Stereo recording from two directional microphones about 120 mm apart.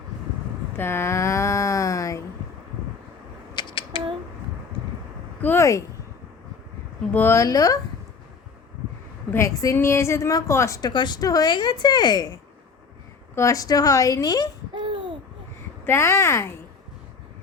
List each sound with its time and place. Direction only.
0.8 s a sound: 20° left (ahead or behind)
3.5 s a sound: 40° left (ahead or behind)
5.4 s speech: 15° left (ahead or behind)
7.1 s a woman's voice: 20° left (ahead or behind)
9.3 s a woman's voice: 25° left (ahead or behind)
10.8 s speech: 35° left (ahead or behind)
13.3 s a woman's voice: 25° left (ahead or behind)
14.8 s babbling: 40° right (ahead or behind)
15.9 s a woman's voice: 20° left (ahead or behind)